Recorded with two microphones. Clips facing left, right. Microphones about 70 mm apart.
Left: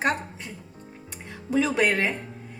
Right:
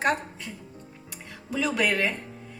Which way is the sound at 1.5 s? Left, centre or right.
Left.